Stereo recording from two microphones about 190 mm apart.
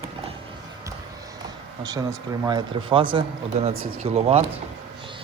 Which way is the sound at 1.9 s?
20° right (ahead or behind).